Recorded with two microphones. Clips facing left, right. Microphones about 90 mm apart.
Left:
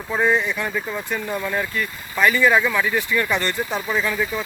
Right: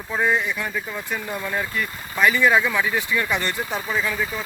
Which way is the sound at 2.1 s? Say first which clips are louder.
Left 1 dB; 10° right (ahead or behind).